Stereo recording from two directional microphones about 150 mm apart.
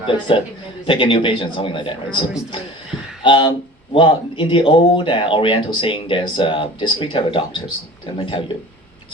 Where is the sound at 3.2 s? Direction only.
35° left (ahead or behind).